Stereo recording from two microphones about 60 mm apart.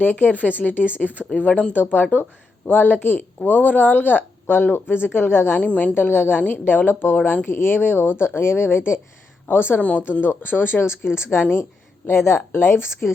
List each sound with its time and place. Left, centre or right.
0.0 s speech: left
1.0 s speech: right
1.4 s speech: left
5.5 s speech: left
5.9 s speech: left
7.2 s speech: left
7.4 s a woman's voice: left